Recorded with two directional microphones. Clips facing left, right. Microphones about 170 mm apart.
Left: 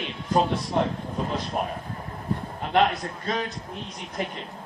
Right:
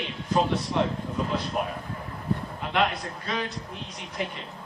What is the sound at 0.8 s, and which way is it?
Speech, 45° left (ahead or behind).